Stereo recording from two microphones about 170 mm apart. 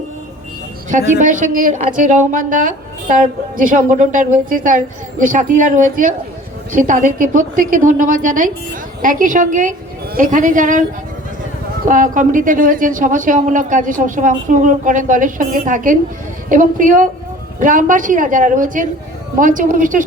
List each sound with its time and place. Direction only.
0.9 s speech: 50° right (ahead or behind)
11.9 s speech: 50° right (ahead or behind)